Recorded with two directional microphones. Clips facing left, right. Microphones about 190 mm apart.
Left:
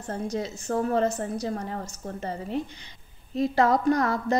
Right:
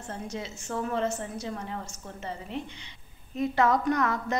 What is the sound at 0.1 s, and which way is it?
A woman's voice, 40° left (ahead or behind).